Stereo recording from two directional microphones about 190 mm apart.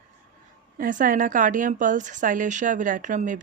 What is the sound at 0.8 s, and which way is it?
A woman's voice, 45° right (ahead or behind).